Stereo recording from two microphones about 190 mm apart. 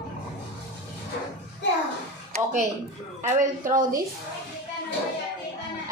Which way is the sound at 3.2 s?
40° right (ahead or behind).